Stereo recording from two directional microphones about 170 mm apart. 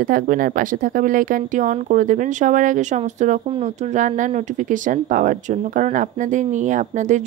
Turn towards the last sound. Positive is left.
turn(degrees=-45)  # may be behind; listen again after turning